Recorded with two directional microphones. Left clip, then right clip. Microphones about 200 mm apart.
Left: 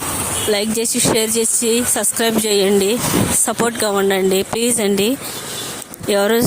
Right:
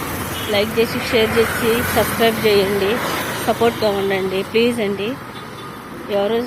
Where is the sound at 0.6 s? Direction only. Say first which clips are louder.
Right 2 dB; 60° left (ahead or behind).